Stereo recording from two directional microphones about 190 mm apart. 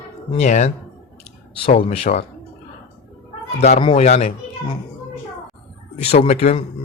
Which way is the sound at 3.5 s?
35° left (ahead or behind).